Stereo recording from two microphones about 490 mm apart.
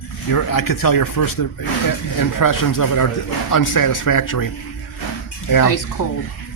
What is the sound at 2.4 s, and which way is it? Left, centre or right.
Speech, left.